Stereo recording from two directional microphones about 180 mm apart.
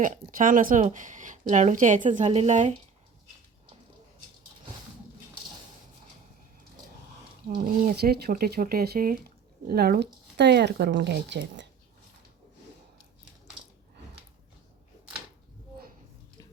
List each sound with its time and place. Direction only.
0.0 s speech: 50° right (ahead or behind)
7.4 s speech: 55° right (ahead or behind); by 11.7 s 75° right (ahead or behind)